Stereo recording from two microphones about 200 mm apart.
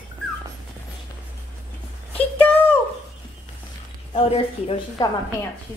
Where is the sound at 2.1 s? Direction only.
10° left (ahead or behind).